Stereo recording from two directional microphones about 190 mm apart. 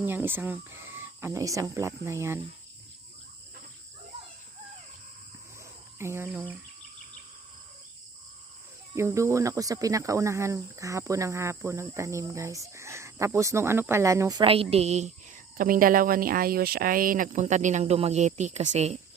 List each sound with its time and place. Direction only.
0.0 s speech: 10° right (ahead or behind)
6.0 s speech: 15° right (ahead or behind)
9.0 s speech: 15° right (ahead or behind); by 18.9 s 35° right (ahead or behind)